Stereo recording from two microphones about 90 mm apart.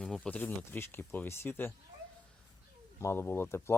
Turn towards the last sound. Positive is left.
turn(degrees=25)  # may be behind; listen again after turning